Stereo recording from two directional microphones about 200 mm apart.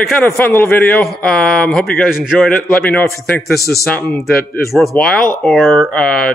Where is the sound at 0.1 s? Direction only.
10° left (ahead or behind).